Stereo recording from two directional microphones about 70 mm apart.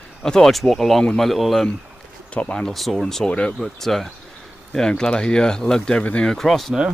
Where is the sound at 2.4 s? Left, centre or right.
Left.